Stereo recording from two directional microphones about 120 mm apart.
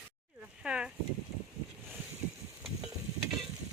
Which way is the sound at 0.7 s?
5° right (ahead or behind).